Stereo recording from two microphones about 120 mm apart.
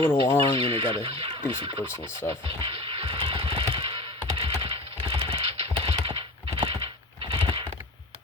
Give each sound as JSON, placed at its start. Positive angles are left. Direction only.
{"t": 0.1, "sound": "speech", "side_deg": 20}
{"t": 0.6, "sound": "speech", "side_deg": -50}
{"t": 2.5, "sound": "music", "side_deg": -50}
{"t": 7.3, "sound": "computer keyboard", "side_deg": -55}